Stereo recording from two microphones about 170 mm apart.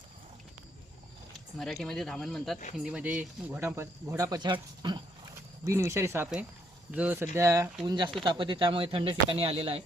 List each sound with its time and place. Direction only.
1.5 s speech: centre (ahead or behind); by 9.8 s 35° right (ahead or behind)